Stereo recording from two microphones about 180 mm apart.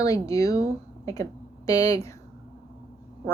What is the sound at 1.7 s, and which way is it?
Speech, 20° left (ahead or behind).